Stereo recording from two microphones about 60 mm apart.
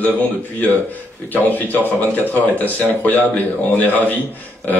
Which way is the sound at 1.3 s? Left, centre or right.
Left.